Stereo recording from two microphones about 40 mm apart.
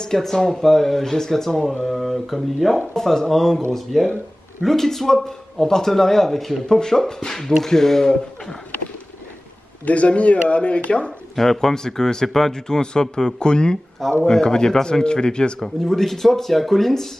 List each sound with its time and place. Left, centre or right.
0.0 s speech: centre
2.9 s speech: centre
9.8 s speech: left
11.3 s speech: centre
15.6 s speech: centre